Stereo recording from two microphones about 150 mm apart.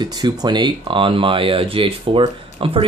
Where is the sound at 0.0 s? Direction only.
25° right (ahead or behind).